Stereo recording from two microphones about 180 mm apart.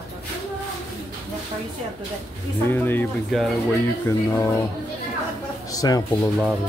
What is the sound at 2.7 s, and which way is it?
Speech, 10° left (ahead or behind).